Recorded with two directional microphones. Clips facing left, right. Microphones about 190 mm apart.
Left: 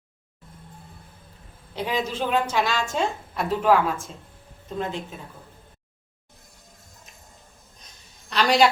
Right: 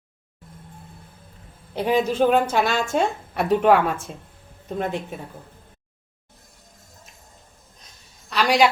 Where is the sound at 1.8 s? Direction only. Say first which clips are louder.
Right 7 dB; 50° right (ahead or behind).